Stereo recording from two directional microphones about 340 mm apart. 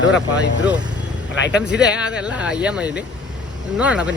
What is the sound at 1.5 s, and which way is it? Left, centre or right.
Speech, centre.